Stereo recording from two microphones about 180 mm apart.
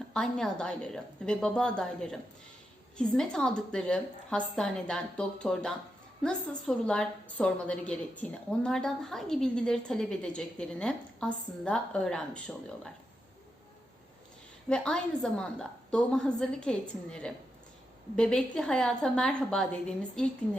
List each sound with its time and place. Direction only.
0.1 s a woman's voice: 5° left (ahead or behind)
14.7 s a woman's voice: 5° left (ahead or behind)